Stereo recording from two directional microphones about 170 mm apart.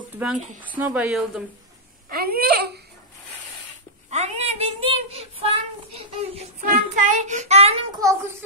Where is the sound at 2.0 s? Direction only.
65° right (ahead or behind).